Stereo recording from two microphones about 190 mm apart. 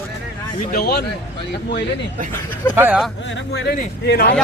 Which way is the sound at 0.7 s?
55° left (ahead or behind).